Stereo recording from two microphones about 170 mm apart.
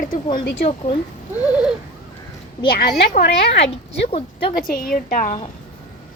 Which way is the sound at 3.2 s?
85° left.